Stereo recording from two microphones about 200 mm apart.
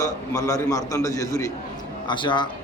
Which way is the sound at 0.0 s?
15° left (ahead or behind).